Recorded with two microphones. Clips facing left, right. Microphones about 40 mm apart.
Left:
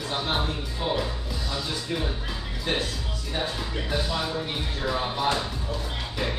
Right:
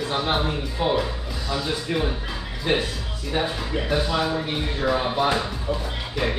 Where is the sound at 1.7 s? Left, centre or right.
Centre.